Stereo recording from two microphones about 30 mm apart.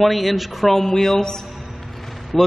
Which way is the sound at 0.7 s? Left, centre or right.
Centre.